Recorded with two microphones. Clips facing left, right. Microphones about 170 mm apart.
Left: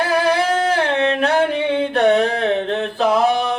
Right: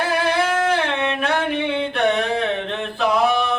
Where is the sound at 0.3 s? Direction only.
35° left (ahead or behind).